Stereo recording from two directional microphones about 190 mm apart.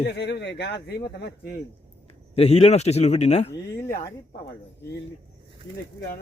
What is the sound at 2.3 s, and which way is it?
A man's voice, 30° left (ahead or behind).